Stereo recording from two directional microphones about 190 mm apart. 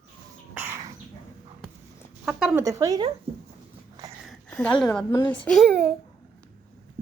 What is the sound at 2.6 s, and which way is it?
Speech, 15° right (ahead or behind).